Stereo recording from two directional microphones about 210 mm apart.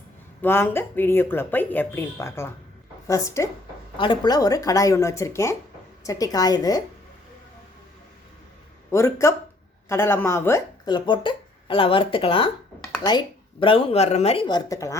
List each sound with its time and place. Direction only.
0.4 s speech: 10° left (ahead or behind)
8.9 s speech: 15° left (ahead or behind)